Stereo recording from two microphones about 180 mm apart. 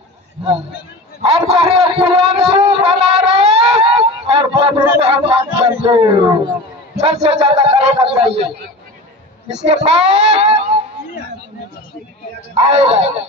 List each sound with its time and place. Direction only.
1.2 s a man's voice: 35° right (ahead or behind)
9.5 s speech: 40° right (ahead or behind)
12.5 s speech: 30° right (ahead or behind)